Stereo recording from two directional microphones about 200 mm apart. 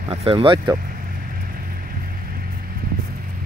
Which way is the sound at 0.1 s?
30° right (ahead or behind).